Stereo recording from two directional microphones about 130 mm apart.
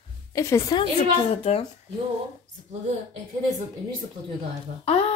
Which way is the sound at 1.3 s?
50° left (ahead or behind).